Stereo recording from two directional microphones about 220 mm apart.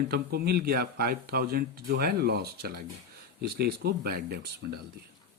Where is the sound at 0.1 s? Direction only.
45° right (ahead or behind).